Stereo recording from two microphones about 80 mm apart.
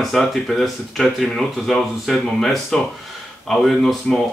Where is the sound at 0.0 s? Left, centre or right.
Centre.